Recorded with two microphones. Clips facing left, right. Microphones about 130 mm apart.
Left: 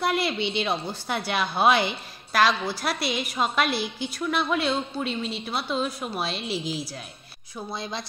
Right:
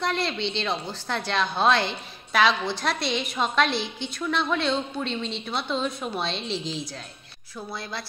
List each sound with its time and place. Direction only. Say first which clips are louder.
0.0 s a woman's voice: left 2 dB; 10° left (ahead or behind)
7.5 s a woman's voice: left 2 dB; 15° left (ahead or behind)